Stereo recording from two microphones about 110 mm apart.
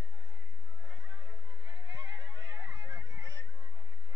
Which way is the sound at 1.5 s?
45° right (ahead or behind).